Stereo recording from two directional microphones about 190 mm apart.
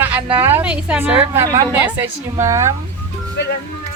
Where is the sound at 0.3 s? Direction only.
10° right (ahead or behind).